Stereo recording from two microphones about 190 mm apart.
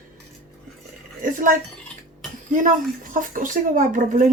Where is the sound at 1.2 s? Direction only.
45° right (ahead or behind).